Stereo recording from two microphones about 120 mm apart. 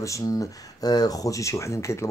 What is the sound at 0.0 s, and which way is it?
Speech, 25° left (ahead or behind).